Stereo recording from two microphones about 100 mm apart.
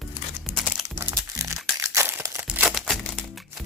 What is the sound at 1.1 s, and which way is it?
Crumpling, 35° right (ahead or behind).